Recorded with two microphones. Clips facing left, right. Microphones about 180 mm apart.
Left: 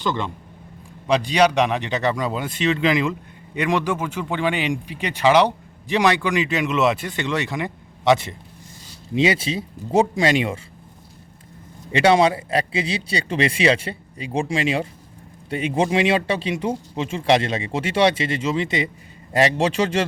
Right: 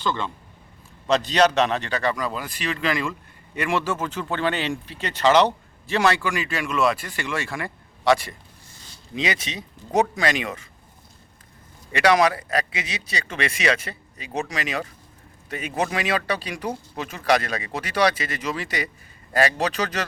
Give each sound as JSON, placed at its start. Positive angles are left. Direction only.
{"t": 0.0, "sound": "speech", "side_deg": 15}
{"t": 11.9, "sound": "speech", "side_deg": 25}